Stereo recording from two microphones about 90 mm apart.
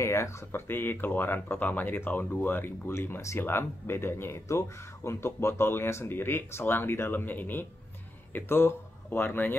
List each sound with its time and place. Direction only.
0.0 s speech: 30° left (ahead or behind)